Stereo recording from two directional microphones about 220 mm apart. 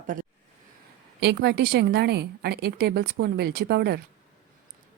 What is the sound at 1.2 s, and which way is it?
A woman's voice, 50° right (ahead or behind).